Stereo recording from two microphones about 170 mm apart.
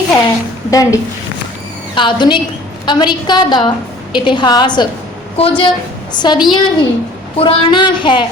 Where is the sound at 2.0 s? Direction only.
25° left (ahead or behind).